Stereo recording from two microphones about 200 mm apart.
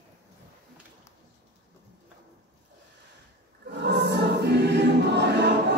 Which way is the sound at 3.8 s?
55° right (ahead or behind).